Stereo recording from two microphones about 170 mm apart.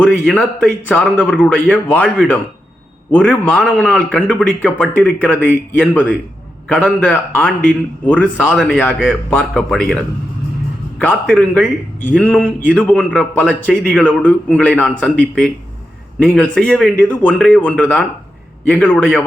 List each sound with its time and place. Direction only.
0.3 s a man's voice: 10° left (ahead or behind)
11.0 s a man's voice: 10° left (ahead or behind)